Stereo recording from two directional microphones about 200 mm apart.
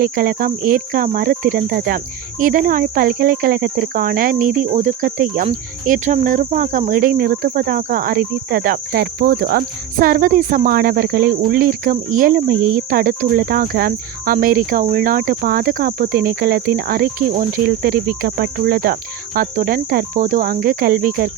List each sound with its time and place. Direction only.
0.0 s speech: 50° right (ahead or behind)